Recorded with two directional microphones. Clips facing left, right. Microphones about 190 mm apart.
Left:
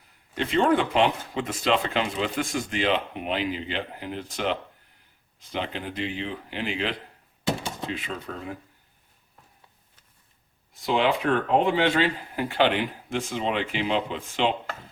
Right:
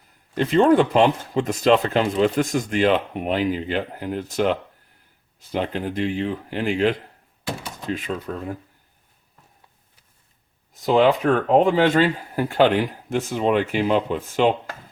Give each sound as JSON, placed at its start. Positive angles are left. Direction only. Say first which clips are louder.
{"t": 0.3, "sound": "speech", "louder": "right 6 dB", "side_deg": -40}
{"t": 7.4, "sound": "a sound", "louder": "left 3 dB", "side_deg": 25}
{"t": 7.9, "sound": "speech", "louder": "right 9 dB", "side_deg": -45}
{"t": 10.8, "sound": "speech", "louder": "right 6 dB", "side_deg": -40}